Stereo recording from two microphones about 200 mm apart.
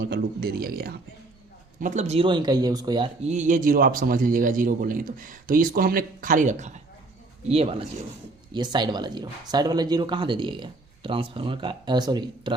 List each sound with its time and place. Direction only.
0.0 s a man's voice: 50° right (ahead or behind)
1.8 s speech: 35° right (ahead or behind); by 3.1 s 20° right (ahead or behind)
3.2 s a man's voice: 40° right (ahead or behind); by 12.5 s 20° right (ahead or behind)